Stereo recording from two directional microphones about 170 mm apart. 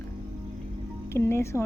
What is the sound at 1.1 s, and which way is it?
Speech, 15° left (ahead or behind).